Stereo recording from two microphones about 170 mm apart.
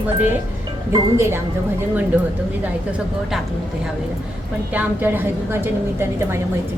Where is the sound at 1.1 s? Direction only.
15° right (ahead or behind).